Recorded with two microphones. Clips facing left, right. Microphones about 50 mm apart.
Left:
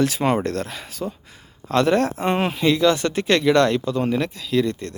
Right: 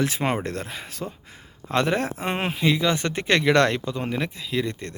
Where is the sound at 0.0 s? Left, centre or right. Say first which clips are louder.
Left 5 dB; right.